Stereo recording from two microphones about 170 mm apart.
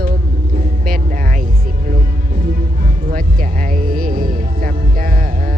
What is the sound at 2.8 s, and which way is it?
Music, 55° right (ahead or behind).